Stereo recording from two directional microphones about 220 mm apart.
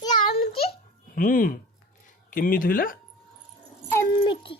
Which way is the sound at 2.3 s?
40° left (ahead or behind).